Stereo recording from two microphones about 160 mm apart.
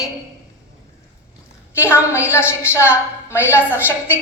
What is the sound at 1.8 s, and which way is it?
A woman's voice, 15° left (ahead or behind).